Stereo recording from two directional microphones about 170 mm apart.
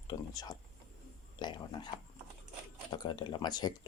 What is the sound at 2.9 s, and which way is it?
Speech, 25° left (ahead or behind).